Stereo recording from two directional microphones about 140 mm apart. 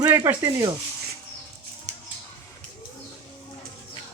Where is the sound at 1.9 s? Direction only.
55° right (ahead or behind).